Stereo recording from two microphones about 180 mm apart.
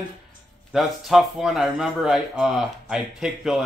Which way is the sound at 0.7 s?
Centre (ahead or behind).